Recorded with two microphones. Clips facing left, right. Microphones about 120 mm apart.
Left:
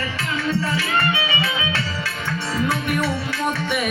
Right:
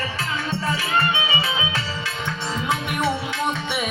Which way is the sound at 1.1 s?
25° right (ahead or behind).